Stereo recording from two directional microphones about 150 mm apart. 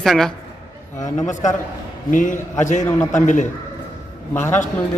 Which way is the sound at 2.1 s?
60° left (ahead or behind).